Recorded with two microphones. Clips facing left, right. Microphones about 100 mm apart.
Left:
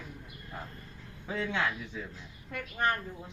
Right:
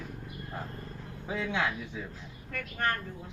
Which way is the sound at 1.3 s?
15° right (ahead or behind).